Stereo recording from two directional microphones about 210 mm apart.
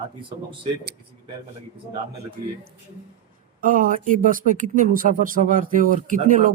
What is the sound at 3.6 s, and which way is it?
Speech, 40° right (ahead or behind).